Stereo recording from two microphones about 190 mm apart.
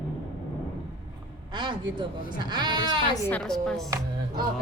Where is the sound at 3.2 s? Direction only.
5° left (ahead or behind).